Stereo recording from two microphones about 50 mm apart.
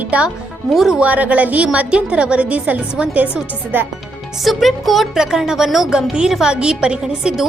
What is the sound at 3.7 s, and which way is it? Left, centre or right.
Speech, right.